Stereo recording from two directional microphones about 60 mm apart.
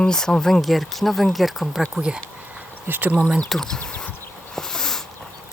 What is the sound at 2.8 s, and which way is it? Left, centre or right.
Speech, right.